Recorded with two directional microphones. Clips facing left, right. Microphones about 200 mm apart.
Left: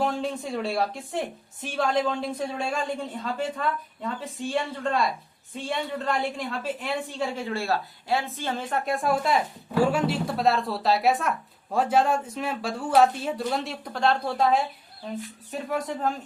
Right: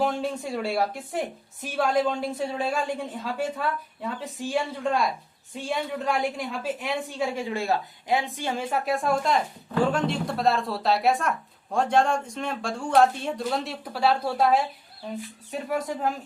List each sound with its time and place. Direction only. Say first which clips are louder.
0.0 s a woman's voice: right 1 dB; centre (ahead or behind)